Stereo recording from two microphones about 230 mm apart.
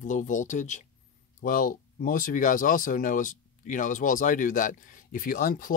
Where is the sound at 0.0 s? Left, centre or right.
Left.